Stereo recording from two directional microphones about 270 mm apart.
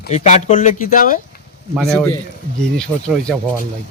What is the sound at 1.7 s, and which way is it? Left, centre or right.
Speech, centre.